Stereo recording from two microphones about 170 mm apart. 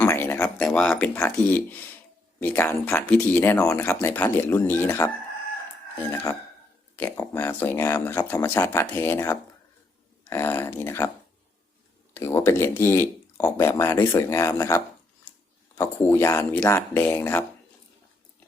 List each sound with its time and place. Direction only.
0.0 s a sound: 15° left (ahead or behind)
0.6 s speech: 5° left (ahead or behind)
12.1 s speech: 15° left (ahead or behind)
15.8 s speech: 15° left (ahead or behind)